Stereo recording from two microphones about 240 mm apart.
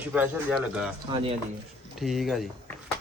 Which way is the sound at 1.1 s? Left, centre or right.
Right.